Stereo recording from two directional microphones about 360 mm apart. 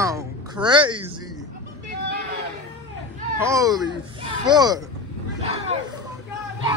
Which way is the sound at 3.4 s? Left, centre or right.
Centre.